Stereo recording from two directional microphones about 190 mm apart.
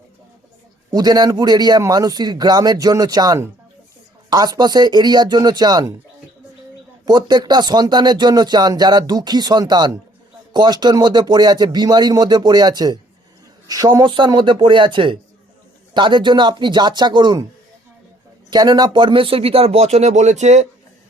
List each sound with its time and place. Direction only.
0.9 s speech: 20° right (ahead or behind)
7.0 s speech: 20° right (ahead or behind)
18.5 s speech: 20° right (ahead or behind); by 20.7 s 35° right (ahead or behind)